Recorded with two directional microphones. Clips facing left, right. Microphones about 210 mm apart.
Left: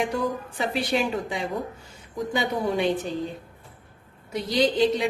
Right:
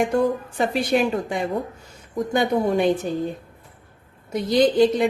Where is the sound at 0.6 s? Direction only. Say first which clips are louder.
Right 5 dB; 50° right (ahead or behind).